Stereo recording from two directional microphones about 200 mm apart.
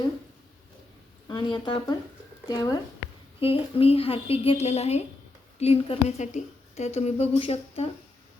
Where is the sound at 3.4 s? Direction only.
30° left (ahead or behind).